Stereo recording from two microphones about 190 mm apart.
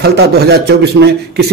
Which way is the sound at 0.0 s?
60° right (ahead or behind).